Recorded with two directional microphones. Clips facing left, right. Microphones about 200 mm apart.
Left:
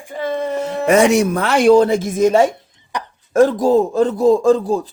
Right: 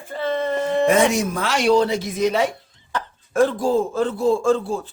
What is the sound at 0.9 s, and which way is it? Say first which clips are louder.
Speech: left 9 dB; 75° left (ahead or behind).